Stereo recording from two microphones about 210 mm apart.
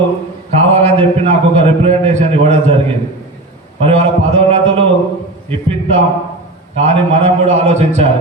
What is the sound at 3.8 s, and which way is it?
Speech, 30° right (ahead or behind).